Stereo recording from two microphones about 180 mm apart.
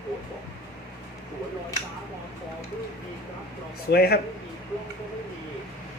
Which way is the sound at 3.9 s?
65° left (ahead or behind).